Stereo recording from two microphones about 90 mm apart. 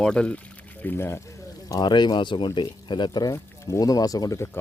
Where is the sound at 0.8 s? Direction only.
25° left (ahead or behind).